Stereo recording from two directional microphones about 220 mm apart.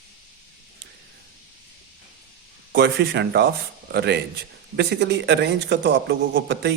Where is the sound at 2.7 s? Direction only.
50° right (ahead or behind).